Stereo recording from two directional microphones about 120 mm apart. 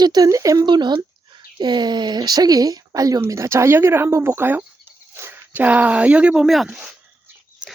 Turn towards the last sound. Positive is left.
turn(degrees=-5)  # may be behind; listen again after turning